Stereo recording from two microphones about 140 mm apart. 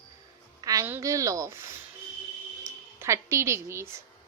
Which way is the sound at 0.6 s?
25° right (ahead or behind).